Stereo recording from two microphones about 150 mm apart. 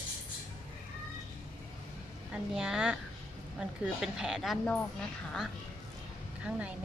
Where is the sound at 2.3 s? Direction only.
5° right (ahead or behind).